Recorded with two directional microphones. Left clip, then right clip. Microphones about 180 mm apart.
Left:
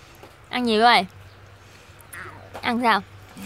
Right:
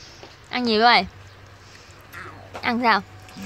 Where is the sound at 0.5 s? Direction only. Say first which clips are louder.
Even; 5° left (ahead or behind).